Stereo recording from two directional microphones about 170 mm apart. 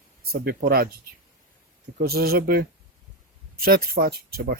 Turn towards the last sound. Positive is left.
turn(degrees=-65)  # may be behind; listen again after turning